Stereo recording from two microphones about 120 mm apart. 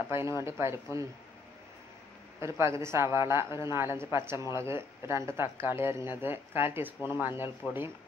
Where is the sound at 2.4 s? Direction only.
25° right (ahead or behind).